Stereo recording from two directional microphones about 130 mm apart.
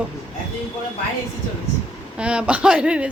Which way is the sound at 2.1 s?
10° right (ahead or behind).